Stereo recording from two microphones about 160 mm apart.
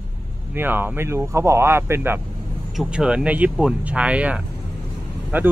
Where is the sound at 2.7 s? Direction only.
5° right (ahead or behind).